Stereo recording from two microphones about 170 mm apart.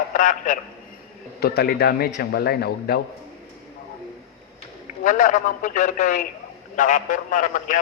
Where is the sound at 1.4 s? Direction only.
65° left (ahead or behind).